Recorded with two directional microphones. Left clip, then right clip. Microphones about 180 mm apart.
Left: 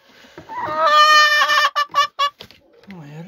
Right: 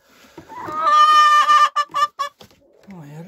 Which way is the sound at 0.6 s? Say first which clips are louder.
Left 1 dB; 60° left (ahead or behind).